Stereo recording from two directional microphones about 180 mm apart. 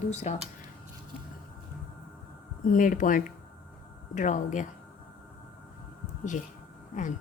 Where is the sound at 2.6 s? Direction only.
50° left (ahead or behind).